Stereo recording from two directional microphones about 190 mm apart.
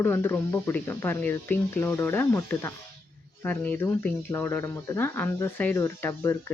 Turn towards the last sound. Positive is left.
turn(degrees=10)  # may be behind; listen again after turning